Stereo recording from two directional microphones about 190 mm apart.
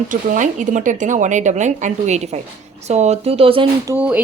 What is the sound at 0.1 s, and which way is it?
A woman's voice, 40° right (ahead or behind).